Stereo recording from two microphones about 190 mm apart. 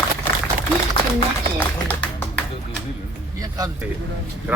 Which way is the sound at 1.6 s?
10° left (ahead or behind).